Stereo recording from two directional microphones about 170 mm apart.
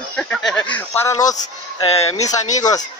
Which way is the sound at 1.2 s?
20° left (ahead or behind).